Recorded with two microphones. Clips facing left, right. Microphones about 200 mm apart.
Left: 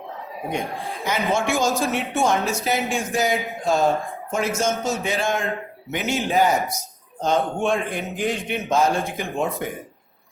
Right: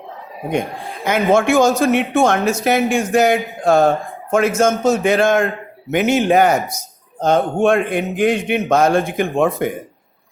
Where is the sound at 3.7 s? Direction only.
60° right (ahead or behind).